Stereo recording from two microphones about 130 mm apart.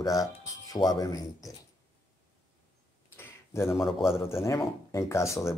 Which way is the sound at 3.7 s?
5° right (ahead or behind).